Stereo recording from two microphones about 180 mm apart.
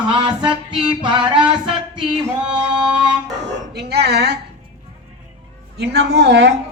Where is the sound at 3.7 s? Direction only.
65° right (ahead or behind).